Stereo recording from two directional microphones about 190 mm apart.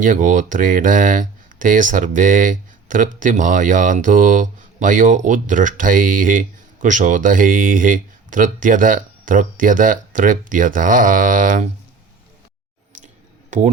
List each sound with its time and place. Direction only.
0.0 s speech: 40° right (ahead or behind)